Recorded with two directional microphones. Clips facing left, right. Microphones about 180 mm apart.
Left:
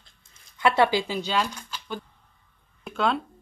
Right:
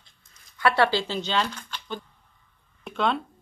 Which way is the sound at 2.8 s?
Centre (ahead or behind).